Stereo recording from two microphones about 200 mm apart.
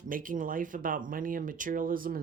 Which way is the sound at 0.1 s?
45° right (ahead or behind).